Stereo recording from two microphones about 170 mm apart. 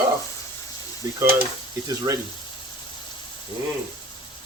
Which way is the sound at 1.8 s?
20° right (ahead or behind).